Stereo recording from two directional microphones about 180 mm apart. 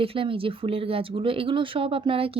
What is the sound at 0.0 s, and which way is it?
A woman's voice, 30° right (ahead or behind).